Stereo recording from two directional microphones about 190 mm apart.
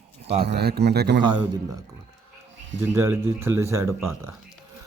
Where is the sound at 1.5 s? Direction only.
20° right (ahead or behind).